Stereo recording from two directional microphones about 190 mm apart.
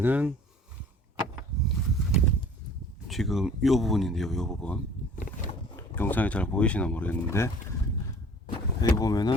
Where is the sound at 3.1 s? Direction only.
Centre (ahead or behind).